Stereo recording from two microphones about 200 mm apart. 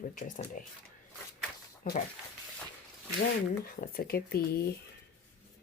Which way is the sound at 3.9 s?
50° left (ahead or behind).